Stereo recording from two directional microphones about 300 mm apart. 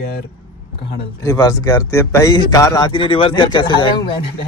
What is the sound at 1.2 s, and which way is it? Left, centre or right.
A man's voice, centre.